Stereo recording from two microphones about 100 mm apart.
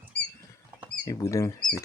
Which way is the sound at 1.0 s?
30° left (ahead or behind).